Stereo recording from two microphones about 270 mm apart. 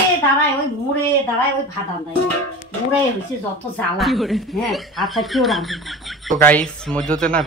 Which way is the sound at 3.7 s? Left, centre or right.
Centre.